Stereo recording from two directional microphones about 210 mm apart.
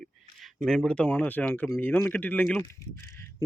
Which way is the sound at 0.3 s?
Centre (ahead or behind).